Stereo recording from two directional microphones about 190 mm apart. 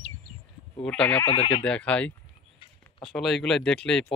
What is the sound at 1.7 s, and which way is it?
Speech, 5° left (ahead or behind).